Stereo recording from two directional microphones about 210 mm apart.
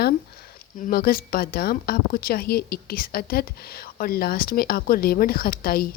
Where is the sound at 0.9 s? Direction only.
45° left (ahead or behind).